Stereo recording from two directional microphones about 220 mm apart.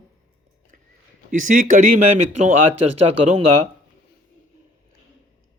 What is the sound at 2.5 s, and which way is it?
Speech, 90° right.